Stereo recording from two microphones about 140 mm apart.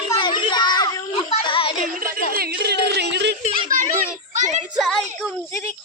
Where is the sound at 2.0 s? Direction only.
90° right.